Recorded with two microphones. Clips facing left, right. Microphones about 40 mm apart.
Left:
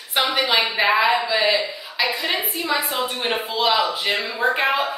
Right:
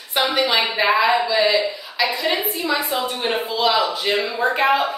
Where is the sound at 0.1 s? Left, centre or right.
Centre.